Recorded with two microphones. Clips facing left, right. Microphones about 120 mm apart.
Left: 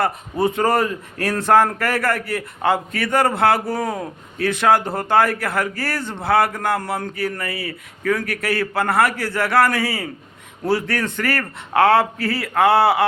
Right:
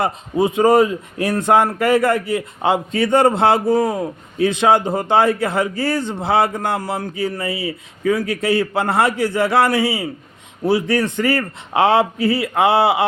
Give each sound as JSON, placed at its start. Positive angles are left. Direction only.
{"t": 0.0, "sound": "a man's voice", "side_deg": -15}